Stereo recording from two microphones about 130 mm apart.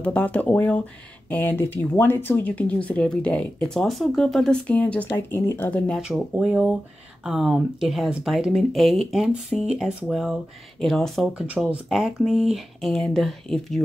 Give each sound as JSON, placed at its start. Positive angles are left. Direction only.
{"t": 0.0, "sound": "speech", "side_deg": 10}
{"t": 5.9, "sound": "speech", "side_deg": -5}
{"t": 11.4, "sound": "speech", "side_deg": -10}